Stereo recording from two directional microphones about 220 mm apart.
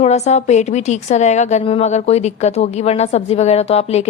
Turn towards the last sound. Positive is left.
turn(degrees=30)  # may be behind; listen again after turning